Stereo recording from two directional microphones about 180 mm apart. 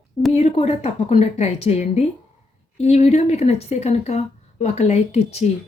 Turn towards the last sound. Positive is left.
turn(degrees=35)  # may be behind; listen again after turning